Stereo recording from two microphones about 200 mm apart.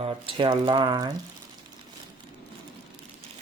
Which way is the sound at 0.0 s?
25° right (ahead or behind).